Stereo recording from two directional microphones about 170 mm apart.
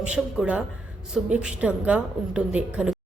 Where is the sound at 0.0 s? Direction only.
5° right (ahead or behind).